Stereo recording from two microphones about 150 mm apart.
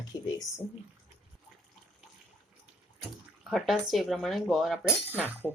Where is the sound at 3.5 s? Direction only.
Centre (ahead or behind).